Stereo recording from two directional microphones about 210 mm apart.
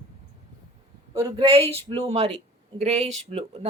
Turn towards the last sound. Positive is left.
turn(degrees=-30)  # may be behind; listen again after turning